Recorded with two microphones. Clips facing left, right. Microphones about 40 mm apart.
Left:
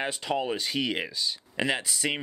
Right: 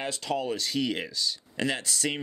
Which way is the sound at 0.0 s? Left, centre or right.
Left.